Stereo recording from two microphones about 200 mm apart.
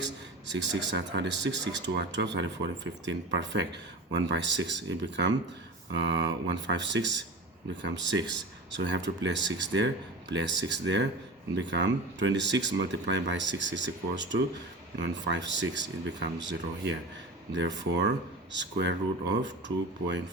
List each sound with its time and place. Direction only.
0.5 s speech: 65° right (ahead or behind)